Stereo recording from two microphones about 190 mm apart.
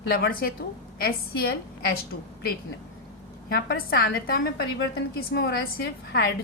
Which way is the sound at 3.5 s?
55° left (ahead or behind).